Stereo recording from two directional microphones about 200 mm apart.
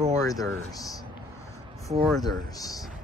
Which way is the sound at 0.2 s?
15° left (ahead or behind).